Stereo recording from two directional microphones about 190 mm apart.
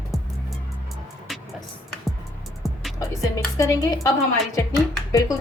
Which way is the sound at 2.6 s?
Centre (ahead or behind).